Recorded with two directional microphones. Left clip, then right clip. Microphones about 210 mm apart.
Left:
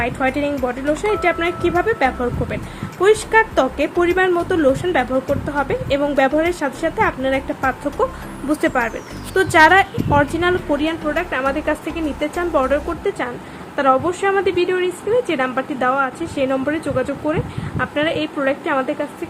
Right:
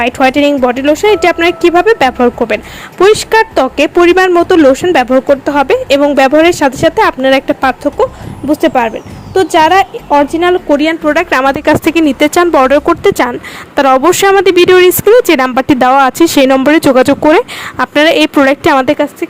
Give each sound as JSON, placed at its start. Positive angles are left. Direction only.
{"t": 0.0, "sound": "speech", "side_deg": -40}
{"t": 8.6, "sound": "speech", "side_deg": -30}
{"t": 11.1, "sound": "speech", "side_deg": -55}